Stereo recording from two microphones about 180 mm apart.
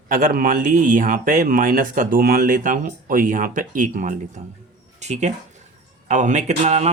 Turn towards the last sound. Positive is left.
turn(degrees=-35)  # may be behind; listen again after turning